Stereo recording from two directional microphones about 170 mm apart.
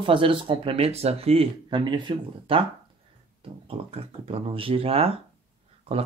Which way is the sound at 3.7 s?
35° right (ahead or behind).